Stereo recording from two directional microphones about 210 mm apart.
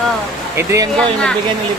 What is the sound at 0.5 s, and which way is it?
Speech, 15° right (ahead or behind).